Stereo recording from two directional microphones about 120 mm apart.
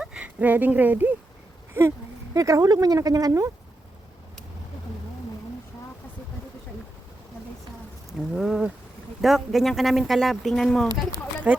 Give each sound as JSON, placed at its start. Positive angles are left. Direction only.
{"t": 0.0, "sound": "speech", "side_deg": -10}
{"t": 8.3, "sound": "speech", "side_deg": -5}
{"t": 11.5, "sound": "speech", "side_deg": -10}